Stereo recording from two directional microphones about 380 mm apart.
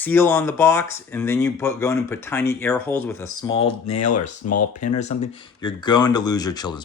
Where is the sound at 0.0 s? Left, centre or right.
Centre.